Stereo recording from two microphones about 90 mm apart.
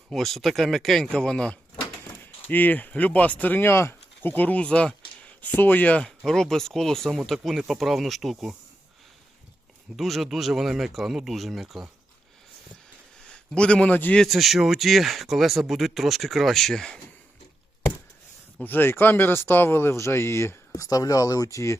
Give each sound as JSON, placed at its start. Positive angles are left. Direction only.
{"t": 0.1, "sound": "speech", "side_deg": 5}
{"t": 2.5, "sound": "speech", "side_deg": 20}
{"t": 6.1, "sound": "speech", "side_deg": 5}
{"t": 9.9, "sound": "speech", "side_deg": 0}
{"t": 13.2, "sound": "a man's voice", "side_deg": 10}
{"t": 14.2, "sound": "speech", "side_deg": 0}
{"t": 18.6, "sound": "speech", "side_deg": 20}